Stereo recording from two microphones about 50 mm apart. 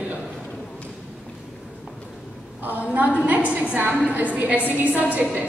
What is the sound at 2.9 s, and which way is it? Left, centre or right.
A woman's voice, right.